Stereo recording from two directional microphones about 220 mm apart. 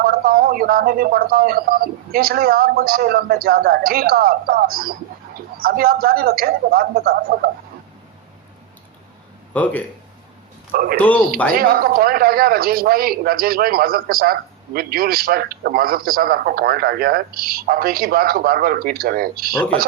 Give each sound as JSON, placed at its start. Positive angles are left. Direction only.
{"t": 0.0, "sound": "a man's voice", "side_deg": -40}
{"t": 9.5, "sound": "speech", "side_deg": 5}
{"t": 10.7, "sound": "speech", "side_deg": -40}
{"t": 10.9, "sound": "speech", "side_deg": 5}
{"t": 11.6, "sound": "a man's voice", "side_deg": -40}